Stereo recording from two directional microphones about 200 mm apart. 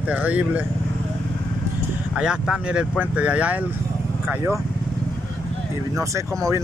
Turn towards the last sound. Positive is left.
turn(degrees=-15)  # may be behind; listen again after turning